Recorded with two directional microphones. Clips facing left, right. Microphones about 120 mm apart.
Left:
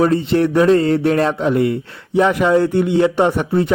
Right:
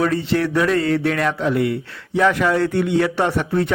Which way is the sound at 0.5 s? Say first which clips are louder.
Left 6 dB; 30° left (ahead or behind).